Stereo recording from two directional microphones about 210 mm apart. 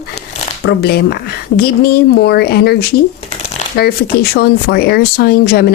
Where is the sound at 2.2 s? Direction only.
50° left (ahead or behind).